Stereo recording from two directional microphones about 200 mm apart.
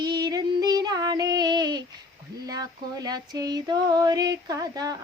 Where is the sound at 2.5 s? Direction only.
20° right (ahead or behind).